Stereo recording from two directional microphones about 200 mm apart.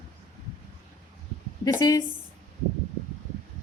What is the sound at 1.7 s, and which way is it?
Speech, 20° left (ahead or behind).